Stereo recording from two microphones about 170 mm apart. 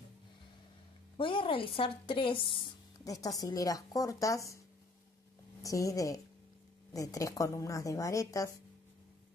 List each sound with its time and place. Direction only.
1.1 s a woman's voice: 30° left (ahead or behind)
5.6 s a woman's voice: 20° left (ahead or behind)